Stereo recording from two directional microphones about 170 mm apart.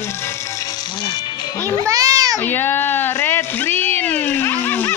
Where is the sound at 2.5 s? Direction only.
10° left (ahead or behind).